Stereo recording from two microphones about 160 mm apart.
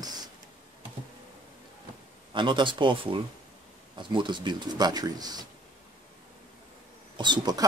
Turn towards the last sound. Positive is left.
turn(degrees=-25)  # may be behind; listen again after turning